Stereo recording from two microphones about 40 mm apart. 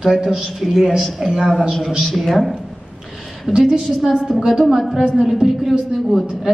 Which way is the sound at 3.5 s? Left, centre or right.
Right.